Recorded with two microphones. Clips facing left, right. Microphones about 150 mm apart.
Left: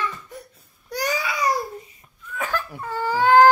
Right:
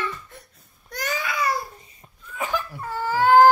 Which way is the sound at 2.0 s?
35° right (ahead or behind).